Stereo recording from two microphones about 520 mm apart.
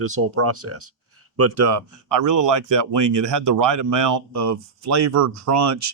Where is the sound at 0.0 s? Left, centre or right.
Right.